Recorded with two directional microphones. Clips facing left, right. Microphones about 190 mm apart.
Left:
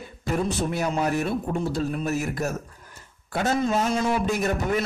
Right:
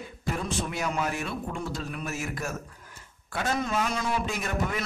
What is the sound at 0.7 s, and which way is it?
A man's voice, 35° left (ahead or behind).